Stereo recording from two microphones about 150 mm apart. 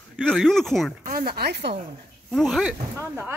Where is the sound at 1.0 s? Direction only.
70° right (ahead or behind); by 1.7 s 90° right.